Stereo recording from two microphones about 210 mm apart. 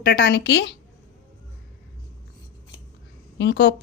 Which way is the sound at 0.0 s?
45° left (ahead or behind).